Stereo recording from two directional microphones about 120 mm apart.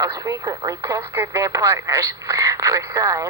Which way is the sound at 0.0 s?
30° right (ahead or behind).